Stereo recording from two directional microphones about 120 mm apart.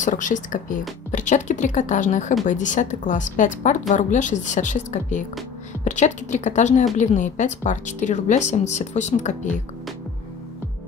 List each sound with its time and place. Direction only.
0.0 s speech: 90° left
5.9 s speech: 80° left